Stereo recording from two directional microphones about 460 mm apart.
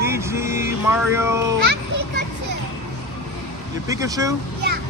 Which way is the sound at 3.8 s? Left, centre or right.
Centre.